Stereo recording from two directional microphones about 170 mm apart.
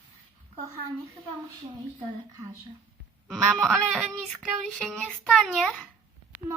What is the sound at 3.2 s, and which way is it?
Female singing, centre (ahead or behind).